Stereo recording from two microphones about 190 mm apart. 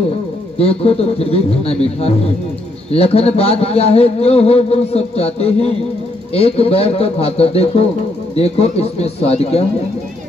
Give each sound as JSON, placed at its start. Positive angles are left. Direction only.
{"t": 0.6, "sound": "a man's voice", "side_deg": 30}